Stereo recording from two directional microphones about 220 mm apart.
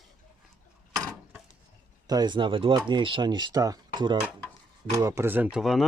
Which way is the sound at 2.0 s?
20° right (ahead or behind).